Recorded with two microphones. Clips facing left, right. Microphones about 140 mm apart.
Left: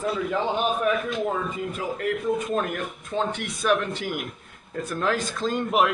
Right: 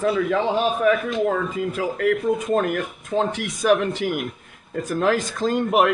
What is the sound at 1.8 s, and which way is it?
Speech, 70° right (ahead or behind).